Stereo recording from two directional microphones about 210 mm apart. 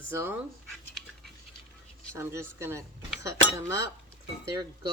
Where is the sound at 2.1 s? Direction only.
10° right (ahead or behind).